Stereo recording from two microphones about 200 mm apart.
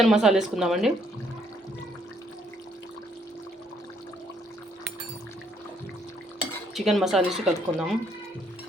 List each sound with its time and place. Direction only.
0.0 s speech: centre (ahead or behind)
6.7 s speech: centre (ahead or behind)